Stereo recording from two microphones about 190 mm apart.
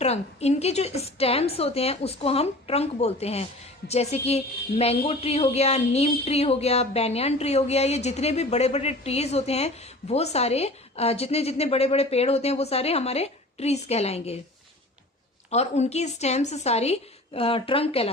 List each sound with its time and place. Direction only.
0.0 s a woman's voice: 35° left (ahead or behind)
15.4 s a woman's voice: 35° left (ahead or behind)